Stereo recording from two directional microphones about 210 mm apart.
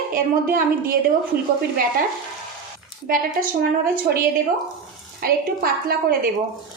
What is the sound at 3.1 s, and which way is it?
Speech, 40° right (ahead or behind).